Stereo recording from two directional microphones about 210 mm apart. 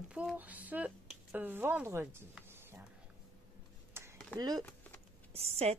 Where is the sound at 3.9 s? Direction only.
10° right (ahead or behind).